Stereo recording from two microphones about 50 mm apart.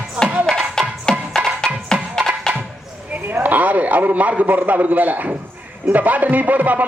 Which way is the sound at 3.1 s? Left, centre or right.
Right.